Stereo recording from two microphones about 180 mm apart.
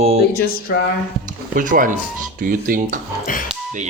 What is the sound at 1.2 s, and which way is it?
Speech, 45° right (ahead or behind).